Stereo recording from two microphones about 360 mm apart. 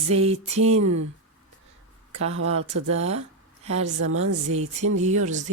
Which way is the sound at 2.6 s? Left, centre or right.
Right.